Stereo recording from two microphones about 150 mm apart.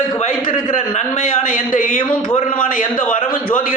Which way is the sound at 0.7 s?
55° left (ahead or behind).